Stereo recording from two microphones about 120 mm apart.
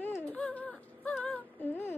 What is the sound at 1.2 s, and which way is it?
Music, 15° left (ahead or behind).